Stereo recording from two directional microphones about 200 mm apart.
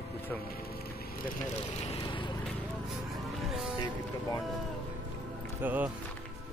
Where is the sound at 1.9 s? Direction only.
25° left (ahead or behind).